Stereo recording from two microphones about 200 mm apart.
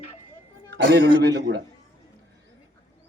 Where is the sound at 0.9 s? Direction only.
60° right (ahead or behind).